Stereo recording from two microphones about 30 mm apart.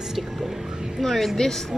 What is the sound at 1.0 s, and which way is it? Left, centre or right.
Speech, centre.